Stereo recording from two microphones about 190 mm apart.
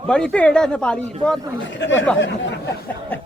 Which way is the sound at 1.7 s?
75° left (ahead or behind).